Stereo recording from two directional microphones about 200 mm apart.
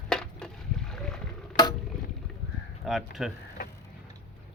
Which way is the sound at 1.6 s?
20° left (ahead or behind).